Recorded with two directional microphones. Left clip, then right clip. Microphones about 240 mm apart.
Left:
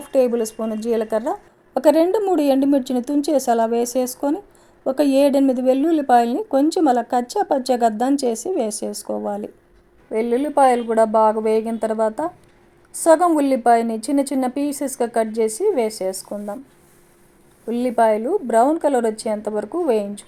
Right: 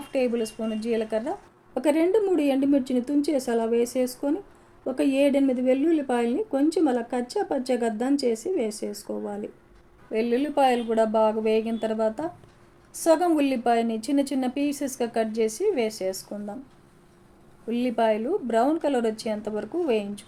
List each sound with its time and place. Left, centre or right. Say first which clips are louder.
0.1 s speech: left 8 dB; left
10.1 s speech: left 5 dB; centre
17.7 s speech: left 7 dB; left